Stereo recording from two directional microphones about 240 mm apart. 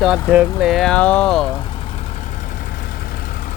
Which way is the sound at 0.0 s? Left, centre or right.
Centre.